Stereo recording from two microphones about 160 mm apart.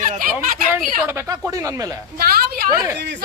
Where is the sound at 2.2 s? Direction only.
70° right (ahead or behind).